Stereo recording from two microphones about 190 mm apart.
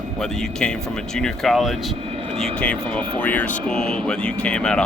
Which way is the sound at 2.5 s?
5° left (ahead or behind).